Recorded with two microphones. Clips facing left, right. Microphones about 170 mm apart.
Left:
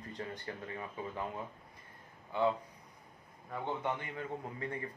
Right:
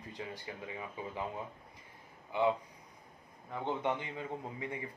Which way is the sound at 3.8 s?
15° right (ahead or behind).